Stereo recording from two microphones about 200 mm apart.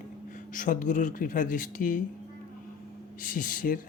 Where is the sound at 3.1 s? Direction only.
40° left (ahead or behind).